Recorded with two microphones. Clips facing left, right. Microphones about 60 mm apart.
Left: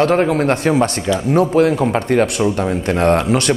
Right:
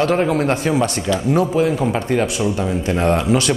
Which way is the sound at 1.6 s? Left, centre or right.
Left.